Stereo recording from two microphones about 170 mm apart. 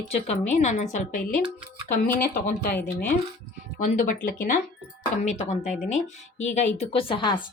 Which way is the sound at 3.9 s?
50° left (ahead or behind).